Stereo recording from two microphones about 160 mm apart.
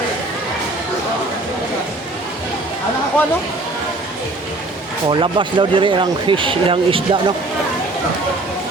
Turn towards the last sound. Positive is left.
turn(degrees=-35)  # may be behind; listen again after turning